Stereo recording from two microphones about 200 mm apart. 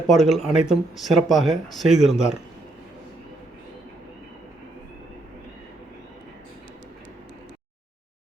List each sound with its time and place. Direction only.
0.1 s speech: centre (ahead or behind)